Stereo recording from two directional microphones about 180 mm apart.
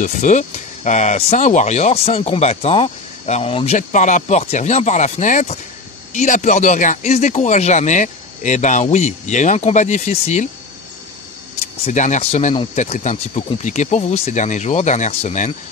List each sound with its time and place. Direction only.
0.0 s speech: 40° left (ahead or behind)
11.8 s speech: 40° left (ahead or behind)